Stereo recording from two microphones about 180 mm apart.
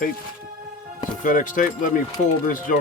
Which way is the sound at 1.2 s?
45° left (ahead or behind).